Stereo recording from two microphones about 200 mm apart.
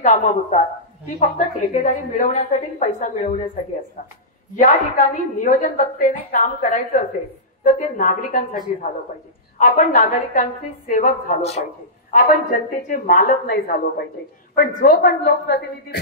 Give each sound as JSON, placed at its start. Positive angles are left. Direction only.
{"t": 0.0, "sound": "a woman's voice", "side_deg": 35}
{"t": 4.6, "sound": "a woman's voice", "side_deg": 40}
{"t": 9.6, "sound": "a woman's voice", "side_deg": 40}